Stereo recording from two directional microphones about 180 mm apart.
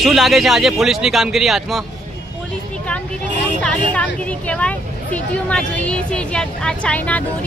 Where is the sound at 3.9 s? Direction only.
10° left (ahead or behind).